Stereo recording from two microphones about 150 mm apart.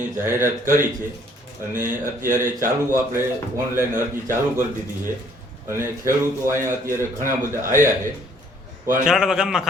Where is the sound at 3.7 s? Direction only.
15° right (ahead or behind).